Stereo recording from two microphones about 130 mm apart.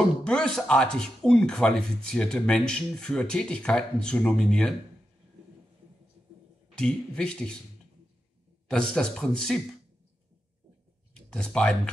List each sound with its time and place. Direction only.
0.2 s speech: 5° left (ahead or behind)
6.7 s speech: 5° left (ahead or behind)
8.6 s speech: 5° left (ahead or behind)
11.1 s speech: 5° left (ahead or behind)